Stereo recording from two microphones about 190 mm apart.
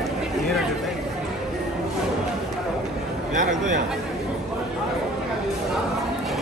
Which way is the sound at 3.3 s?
45° right (ahead or behind).